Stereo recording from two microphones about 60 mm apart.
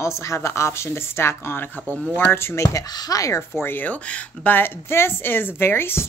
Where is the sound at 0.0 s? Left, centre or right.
Left.